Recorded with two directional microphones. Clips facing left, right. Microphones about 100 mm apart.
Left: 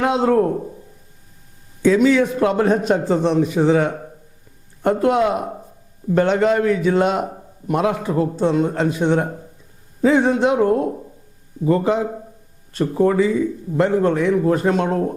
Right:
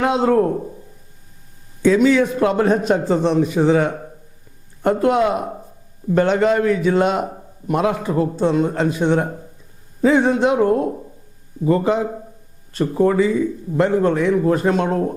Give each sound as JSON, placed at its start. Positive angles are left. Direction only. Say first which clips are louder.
{"t": 0.0, "sound": "a man's voice", "louder": "even", "side_deg": -15}
{"t": 1.8, "sound": "a man's voice", "louder": "even", "side_deg": -15}